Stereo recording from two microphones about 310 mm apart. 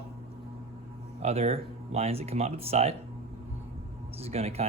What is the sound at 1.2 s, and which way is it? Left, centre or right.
Speech, centre.